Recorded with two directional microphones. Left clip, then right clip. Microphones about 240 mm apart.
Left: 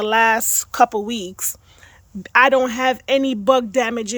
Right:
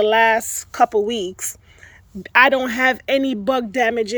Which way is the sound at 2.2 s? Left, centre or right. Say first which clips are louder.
Even; centre.